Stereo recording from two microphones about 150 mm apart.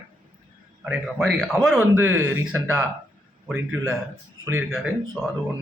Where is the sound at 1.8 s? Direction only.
20° right (ahead or behind); by 5.3 s centre (ahead or behind).